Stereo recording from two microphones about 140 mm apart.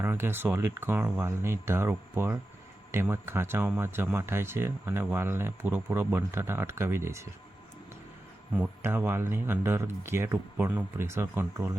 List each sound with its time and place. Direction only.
0.0 s speech: 15° right (ahead or behind)
8.5 s speech: 10° right (ahead or behind)